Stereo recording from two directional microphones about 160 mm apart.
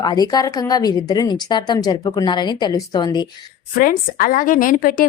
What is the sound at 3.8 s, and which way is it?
A woman's voice, 60° left (ahead or behind).